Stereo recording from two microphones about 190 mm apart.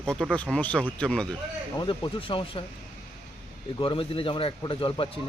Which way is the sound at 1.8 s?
25° left (ahead or behind).